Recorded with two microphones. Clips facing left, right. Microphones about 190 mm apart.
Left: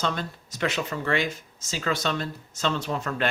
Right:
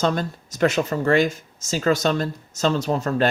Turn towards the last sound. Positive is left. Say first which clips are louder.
# right 7 dB
turn(degrees=-35)  # may be behind; listen again after turning